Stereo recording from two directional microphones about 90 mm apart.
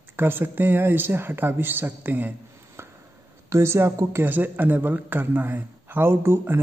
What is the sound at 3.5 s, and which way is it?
A man's voice, 30° right (ahead or behind).